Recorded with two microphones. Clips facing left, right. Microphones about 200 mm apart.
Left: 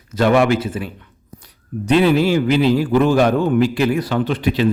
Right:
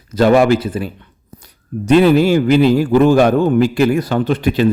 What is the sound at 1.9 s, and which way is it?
A man's voice, 45° right (ahead or behind).